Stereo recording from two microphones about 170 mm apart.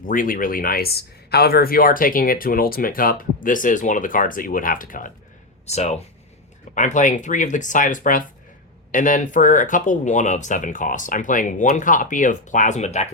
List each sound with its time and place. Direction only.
0.0 s speech: 55° left (ahead or behind)
5.6 s speech: 40° left (ahead or behind)